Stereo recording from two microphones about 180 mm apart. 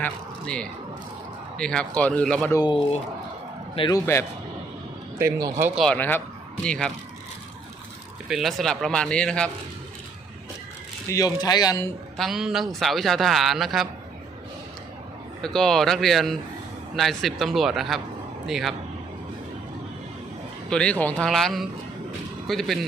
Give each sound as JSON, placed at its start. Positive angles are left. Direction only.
{"t": 0.0, "sound": "a man's voice", "side_deg": 5}
{"t": 2.5, "sound": "speech", "side_deg": 20}
{"t": 3.8, "sound": "a man's voice", "side_deg": 25}
{"t": 5.1, "sound": "speech", "side_deg": -15}
{"t": 5.8, "sound": "speech", "side_deg": 10}
{"t": 8.3, "sound": "a man's voice", "side_deg": 0}
{"t": 11.1, "sound": "speech", "side_deg": 20}
{"t": 12.1, "sound": "a man's voice", "side_deg": 0}
{"t": 15.4, "sound": "a man's voice", "side_deg": 5}
{"t": 20.7, "sound": "a man's voice", "side_deg": 5}